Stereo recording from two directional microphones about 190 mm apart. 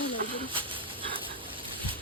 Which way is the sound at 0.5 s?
25° right (ahead or behind).